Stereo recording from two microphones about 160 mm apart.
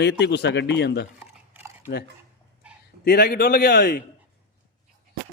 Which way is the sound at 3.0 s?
70° left (ahead or behind).